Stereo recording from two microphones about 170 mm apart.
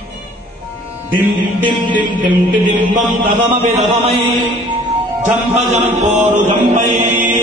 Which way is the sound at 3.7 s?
35° right (ahead or behind).